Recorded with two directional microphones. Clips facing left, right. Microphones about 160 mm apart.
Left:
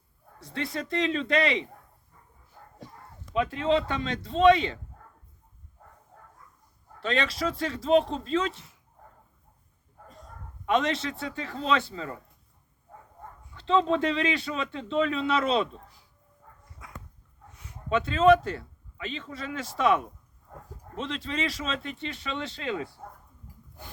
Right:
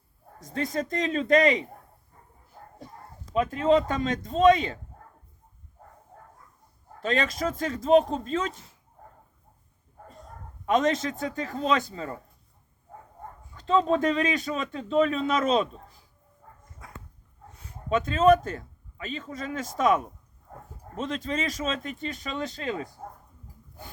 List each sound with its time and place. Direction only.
0.3 s a man's voice: 45° right (ahead or behind)
3.3 s a man's voice: 40° right (ahead or behind)
7.0 s a man's voice: 45° right (ahead or behind)
10.7 s a man's voice: 45° right (ahead or behind)
13.5 s a man's voice: 40° right (ahead or behind)
16.6 s dog: 45° right (ahead or behind)
17.6 s a man's voice: 35° right (ahead or behind)